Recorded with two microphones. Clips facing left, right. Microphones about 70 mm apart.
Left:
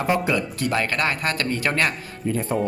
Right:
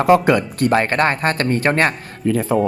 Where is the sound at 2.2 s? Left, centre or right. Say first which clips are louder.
Right 7 dB; right.